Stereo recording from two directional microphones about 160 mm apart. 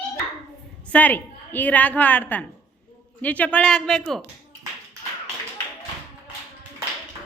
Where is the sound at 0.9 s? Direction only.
10° left (ahead or behind).